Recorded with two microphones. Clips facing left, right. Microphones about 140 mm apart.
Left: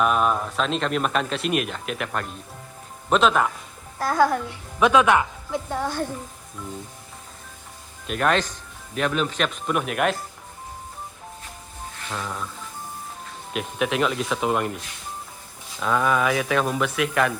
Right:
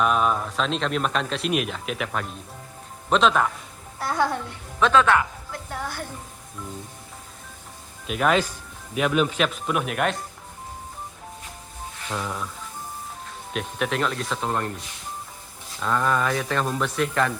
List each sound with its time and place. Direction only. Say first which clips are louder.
0.0 s speech: left 1 dB; centre (ahead or behind)
4.0 s a child's voice: left 4 dB; 20° right (ahead or behind)
4.8 s speech: left 1 dB; 15° left (ahead or behind)
8.0 s speech: right 1 dB; 5° right (ahead or behind)
12.1 s speech: right 1 dB; 5° right (ahead or behind)
13.5 s speech: left 2 dB; 5° left (ahead or behind)
15.8 s speech: left 2 dB; 5° left (ahead or behind)